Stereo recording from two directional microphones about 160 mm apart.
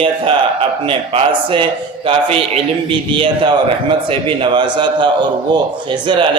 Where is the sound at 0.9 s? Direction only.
30° right (ahead or behind).